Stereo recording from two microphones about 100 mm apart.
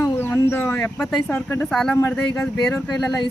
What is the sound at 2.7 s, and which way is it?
Speech, 5° left (ahead or behind).